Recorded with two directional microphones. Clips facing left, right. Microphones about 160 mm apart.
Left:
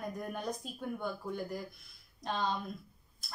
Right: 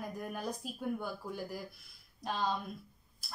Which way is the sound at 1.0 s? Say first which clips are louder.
Left 3 dB; 5° right (ahead or behind).